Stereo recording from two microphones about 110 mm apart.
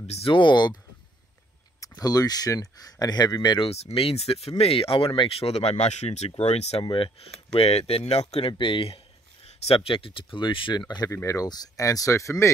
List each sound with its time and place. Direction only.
0.0 s speech: 70° left (ahead or behind)
0.3 s speech: 45° left (ahead or behind)
1.8 s speech: 35° left (ahead or behind)
3.7 s speech: 65° left (ahead or behind)
5.5 s speech: 75° left (ahead or behind)
6.8 s speech: 55° left (ahead or behind)
11.1 s speech: 30° left (ahead or behind)